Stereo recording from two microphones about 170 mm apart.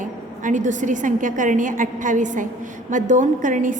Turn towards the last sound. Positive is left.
turn(degrees=-50)  # may be behind; listen again after turning